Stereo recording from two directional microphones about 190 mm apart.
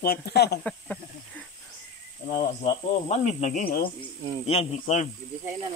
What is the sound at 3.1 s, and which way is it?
Speech, 35° left (ahead or behind).